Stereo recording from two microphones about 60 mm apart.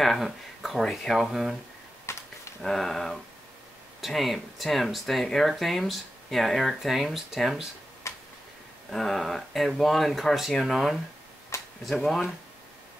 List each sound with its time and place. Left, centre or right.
0.0 s speech: centre
2.1 s a sound: left
2.6 s speech: centre
8.0 s tick-tock: left
8.9 s speech: centre